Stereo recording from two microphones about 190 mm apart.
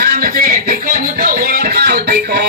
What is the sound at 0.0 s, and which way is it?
Music, 55° right (ahead or behind).